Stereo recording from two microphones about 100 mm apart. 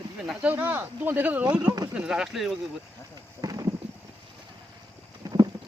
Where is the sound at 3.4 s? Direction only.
40° right (ahead or behind).